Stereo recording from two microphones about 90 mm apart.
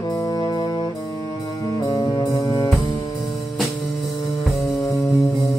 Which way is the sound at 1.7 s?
45° left (ahead or behind).